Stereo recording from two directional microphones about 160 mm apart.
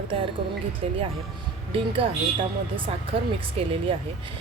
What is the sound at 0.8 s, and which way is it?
A woman's voice, 40° right (ahead or behind).